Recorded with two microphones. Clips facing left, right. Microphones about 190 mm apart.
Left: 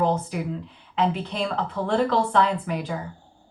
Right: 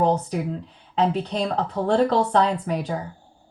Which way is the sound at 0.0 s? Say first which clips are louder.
Right 2 dB; 35° right (ahead or behind).